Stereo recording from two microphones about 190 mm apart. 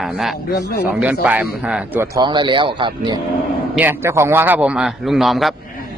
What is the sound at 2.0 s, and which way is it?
Speech, 20° right (ahead or behind).